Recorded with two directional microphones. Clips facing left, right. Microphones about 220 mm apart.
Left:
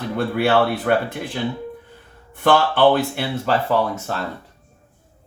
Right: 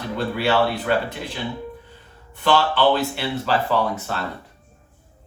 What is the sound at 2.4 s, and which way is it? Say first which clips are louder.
Speech: left 3 dB; 50° left (ahead or behind).